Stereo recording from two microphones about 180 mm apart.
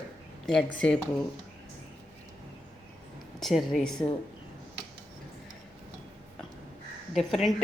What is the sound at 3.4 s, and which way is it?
Speech, centre (ahead or behind).